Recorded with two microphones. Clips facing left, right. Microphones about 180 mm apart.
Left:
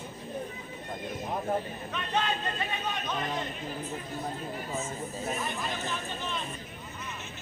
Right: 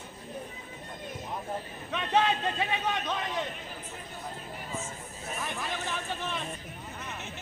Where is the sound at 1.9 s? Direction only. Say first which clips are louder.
Right 5 dB; 85° right.